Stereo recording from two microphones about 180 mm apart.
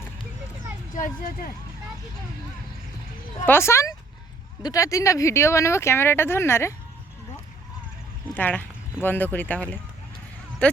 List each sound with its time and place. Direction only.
0.9 s speech: 45° left (ahead or behind)
3.4 s speech: 15° left (ahead or behind)
8.4 s speech: 10° left (ahead or behind)